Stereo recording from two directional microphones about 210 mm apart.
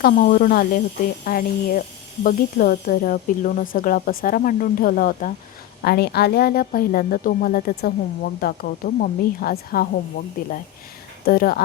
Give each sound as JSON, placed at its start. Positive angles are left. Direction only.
{"t": 0.0, "sound": "a woman's voice", "side_deg": 40}
{"t": 11.3, "sound": "a woman's voice", "side_deg": 45}